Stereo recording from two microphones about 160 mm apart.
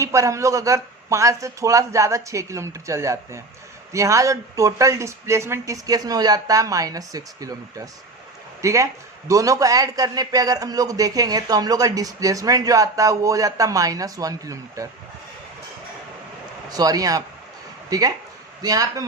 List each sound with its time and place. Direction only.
0.0 s a man's voice: 20° right (ahead or behind)
16.6 s a man's voice: 25° right (ahead or behind)